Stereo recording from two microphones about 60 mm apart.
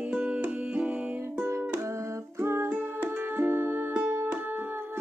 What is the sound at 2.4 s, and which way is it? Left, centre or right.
Music, right.